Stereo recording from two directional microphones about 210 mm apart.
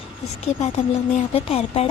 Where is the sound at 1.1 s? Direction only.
30° left (ahead or behind).